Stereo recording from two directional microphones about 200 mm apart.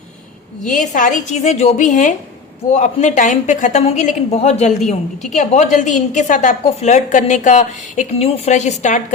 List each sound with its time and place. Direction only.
0.6 s a woman's voice: 40° left (ahead or behind)